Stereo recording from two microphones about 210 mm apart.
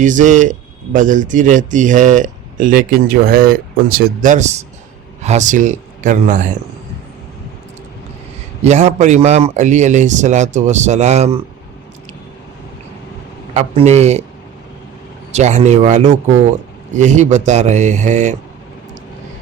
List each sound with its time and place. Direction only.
0.0 s speech: 40° right (ahead or behind)
8.6 s speech: 30° right (ahead or behind)
13.5 s speech: 30° right (ahead or behind)
15.3 s speech: 30° right (ahead or behind)